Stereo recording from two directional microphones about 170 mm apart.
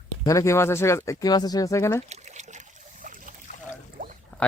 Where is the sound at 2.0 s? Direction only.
40° right (ahead or behind).